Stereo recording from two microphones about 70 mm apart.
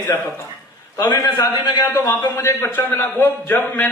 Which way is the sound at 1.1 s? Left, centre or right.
Left.